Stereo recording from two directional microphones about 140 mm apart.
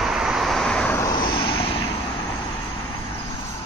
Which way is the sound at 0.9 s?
30° left (ahead or behind).